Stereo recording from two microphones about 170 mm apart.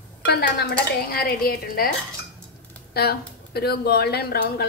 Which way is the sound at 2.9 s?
70° left (ahead or behind).